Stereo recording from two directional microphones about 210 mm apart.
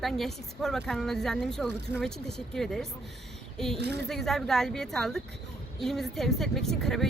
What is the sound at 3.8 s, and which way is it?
Speech, 55° right (ahead or behind).